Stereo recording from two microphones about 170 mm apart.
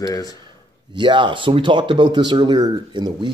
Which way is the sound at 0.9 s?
30° right (ahead or behind).